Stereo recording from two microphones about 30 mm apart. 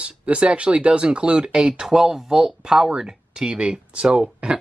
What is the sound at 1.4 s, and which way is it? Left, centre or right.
Speech, right.